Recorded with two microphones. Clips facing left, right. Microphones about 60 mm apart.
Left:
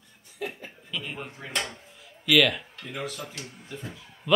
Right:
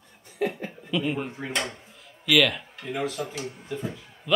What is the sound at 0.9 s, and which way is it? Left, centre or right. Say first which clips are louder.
Speech: right 9 dB; centre.